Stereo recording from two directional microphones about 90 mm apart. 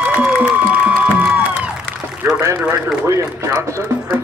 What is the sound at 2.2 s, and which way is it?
A man's voice, 25° right (ahead or behind).